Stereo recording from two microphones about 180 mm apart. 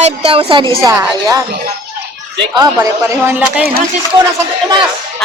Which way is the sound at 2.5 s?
20° right (ahead or behind).